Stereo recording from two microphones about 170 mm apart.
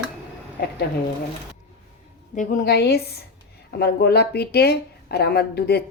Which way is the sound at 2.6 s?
70° left (ahead or behind).